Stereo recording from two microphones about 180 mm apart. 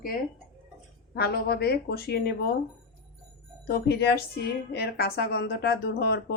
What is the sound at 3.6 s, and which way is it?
A woman's voice, 65° left (ahead or behind).